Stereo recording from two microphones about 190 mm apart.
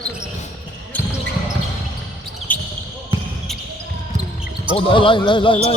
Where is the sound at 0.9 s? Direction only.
10° left (ahead or behind).